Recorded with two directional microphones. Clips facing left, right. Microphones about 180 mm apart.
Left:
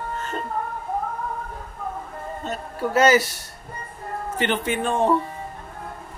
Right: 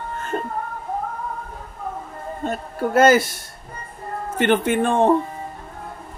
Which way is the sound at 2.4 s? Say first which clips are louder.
Right 4 dB; 55° right (ahead or behind).